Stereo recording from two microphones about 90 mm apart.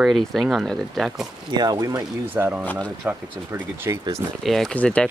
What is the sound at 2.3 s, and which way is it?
Speech, 20° right (ahead or behind).